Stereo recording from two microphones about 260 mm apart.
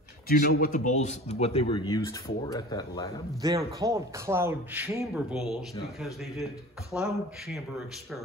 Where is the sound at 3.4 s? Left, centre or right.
Centre.